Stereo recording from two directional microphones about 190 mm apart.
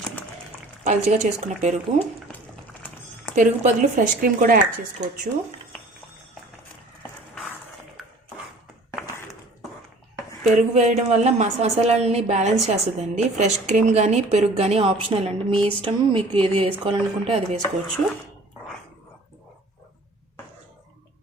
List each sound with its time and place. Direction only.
0.9 s a woman's voice: 40° right (ahead or behind)
3.3 s speech: 40° right (ahead or behind)
10.5 s a woman's voice: 35° right (ahead or behind)